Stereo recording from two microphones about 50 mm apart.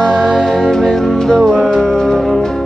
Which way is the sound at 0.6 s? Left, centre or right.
Centre.